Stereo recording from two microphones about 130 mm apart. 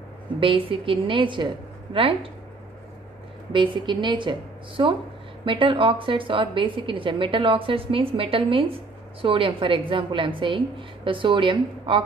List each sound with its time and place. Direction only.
0.4 s a woman's voice: 40° right (ahead or behind)
3.5 s a woman's voice: 35° right (ahead or behind)